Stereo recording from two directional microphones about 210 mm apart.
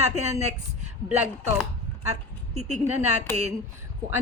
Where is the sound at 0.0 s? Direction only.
30° right (ahead or behind).